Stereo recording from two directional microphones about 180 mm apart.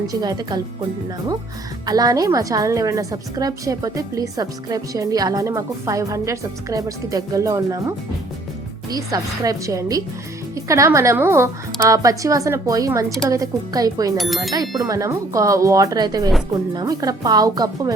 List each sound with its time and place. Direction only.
0.1 s a woman's voice: 20° right (ahead or behind)
1.9 s a woman's voice: 20° right (ahead or behind)
14.2 s speech: centre (ahead or behind)
14.8 s a woman's voice: 20° right (ahead or behind)